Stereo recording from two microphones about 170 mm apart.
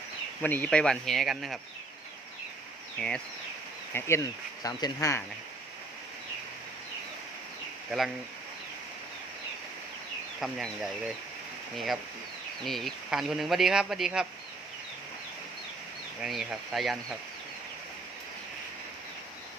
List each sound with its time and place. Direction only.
0.4 s speech: 10° left (ahead or behind)
3.0 s speech: 5° left (ahead or behind)
7.9 s speech: centre (ahead or behind)
10.4 s speech: centre (ahead or behind)
12.6 s speech: centre (ahead or behind)
16.2 s speech: centre (ahead or behind)